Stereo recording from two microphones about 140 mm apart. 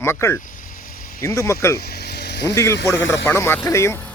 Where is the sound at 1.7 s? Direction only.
90° left.